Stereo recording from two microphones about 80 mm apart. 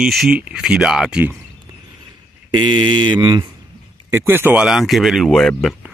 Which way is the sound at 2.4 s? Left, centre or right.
Right.